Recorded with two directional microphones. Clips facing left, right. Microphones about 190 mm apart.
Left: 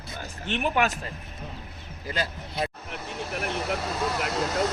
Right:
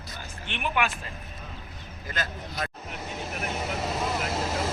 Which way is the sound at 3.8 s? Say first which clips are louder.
Even; 20° right (ahead or behind).